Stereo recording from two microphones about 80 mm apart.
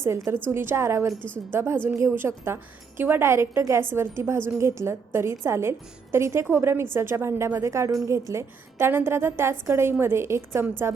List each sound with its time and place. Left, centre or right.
0.0 s a woman's voice: right